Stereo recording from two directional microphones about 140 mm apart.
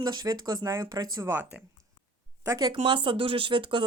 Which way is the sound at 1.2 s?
15° right (ahead or behind).